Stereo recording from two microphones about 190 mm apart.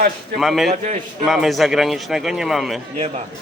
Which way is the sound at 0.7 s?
40° right (ahead or behind).